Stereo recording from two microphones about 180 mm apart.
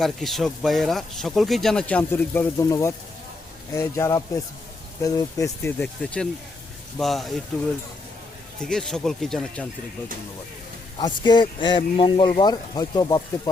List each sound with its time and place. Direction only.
0.0 s speech: centre (ahead or behind); by 5.7 s 20° left (ahead or behind)
5.8 s speech: 5° left (ahead or behind)
8.6 s speech: 5° left (ahead or behind)
10.9 s speech: 25° left (ahead or behind)